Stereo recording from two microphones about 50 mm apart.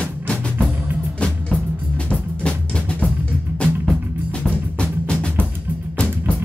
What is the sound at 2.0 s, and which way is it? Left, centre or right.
Music, left.